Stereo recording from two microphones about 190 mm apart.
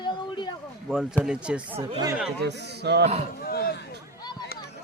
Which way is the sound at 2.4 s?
60° right (ahead or behind).